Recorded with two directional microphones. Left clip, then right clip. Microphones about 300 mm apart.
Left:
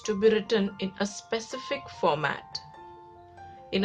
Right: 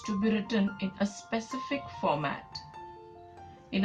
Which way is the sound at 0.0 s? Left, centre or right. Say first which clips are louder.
Left 9 dB; left.